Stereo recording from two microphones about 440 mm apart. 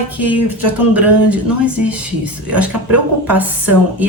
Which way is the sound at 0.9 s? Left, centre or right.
Centre.